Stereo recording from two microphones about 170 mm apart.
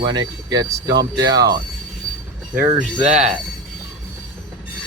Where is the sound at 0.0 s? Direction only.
25° right (ahead or behind).